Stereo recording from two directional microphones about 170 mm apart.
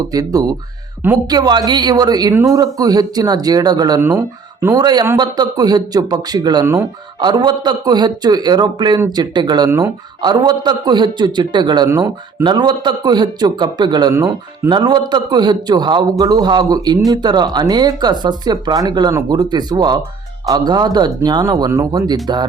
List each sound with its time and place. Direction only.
0.1 s speech: 20° right (ahead or behind)